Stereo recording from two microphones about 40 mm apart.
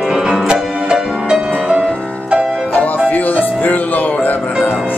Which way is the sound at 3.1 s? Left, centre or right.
Left.